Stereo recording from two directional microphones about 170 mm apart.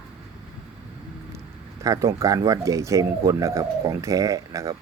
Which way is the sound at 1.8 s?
20° right (ahead or behind).